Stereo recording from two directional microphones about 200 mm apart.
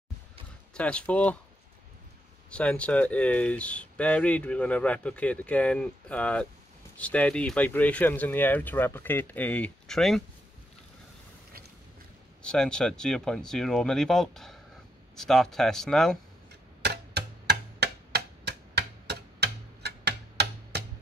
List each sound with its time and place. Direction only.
0.7 s speech: 5° left (ahead or behind)
2.5 s speech: 5° left (ahead or behind)
12.4 s speech: 5° left (ahead or behind)
16.8 s tick-tock: 55° right (ahead or behind)